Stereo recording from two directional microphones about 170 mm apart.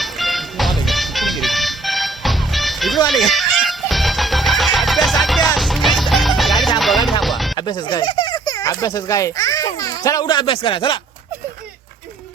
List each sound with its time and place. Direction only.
0.0 s music: centre (ahead or behind)
7.5 s speech: 25° left (ahead or behind)